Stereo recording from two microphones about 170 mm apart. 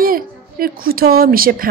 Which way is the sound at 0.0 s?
60° right (ahead or behind).